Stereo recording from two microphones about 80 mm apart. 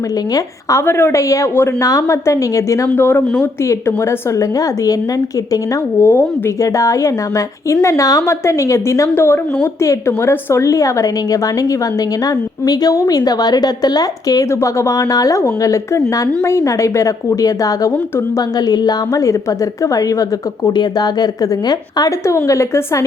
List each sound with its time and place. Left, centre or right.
0.9 s speech: left
1.8 s speech: left
2.9 s speech: left
4.4 s a woman's voice: left
6.0 s speech: left
6.6 s a woman's voice: left
20.7 s a woman's voice: left
22.4 s speech: left